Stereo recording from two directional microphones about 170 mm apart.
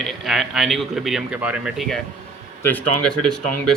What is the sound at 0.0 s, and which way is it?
Speech, centre (ahead or behind).